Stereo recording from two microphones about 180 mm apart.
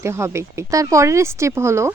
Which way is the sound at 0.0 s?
15° right (ahead or behind).